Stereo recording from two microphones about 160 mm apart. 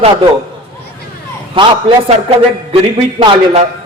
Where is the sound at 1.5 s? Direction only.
30° right (ahead or behind).